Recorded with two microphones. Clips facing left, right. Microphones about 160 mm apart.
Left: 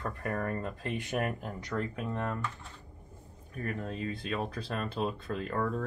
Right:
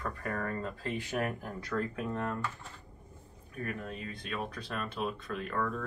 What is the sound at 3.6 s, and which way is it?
Speech, 30° left (ahead or behind).